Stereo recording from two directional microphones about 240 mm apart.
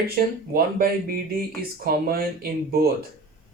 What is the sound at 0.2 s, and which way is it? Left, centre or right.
Speech, right.